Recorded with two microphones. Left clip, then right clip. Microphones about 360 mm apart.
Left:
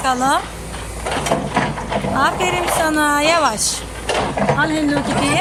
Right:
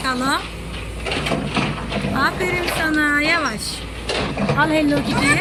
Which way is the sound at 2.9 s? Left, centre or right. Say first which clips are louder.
Even; centre.